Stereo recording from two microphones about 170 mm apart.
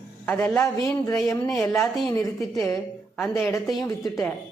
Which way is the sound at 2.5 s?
15° left (ahead or behind).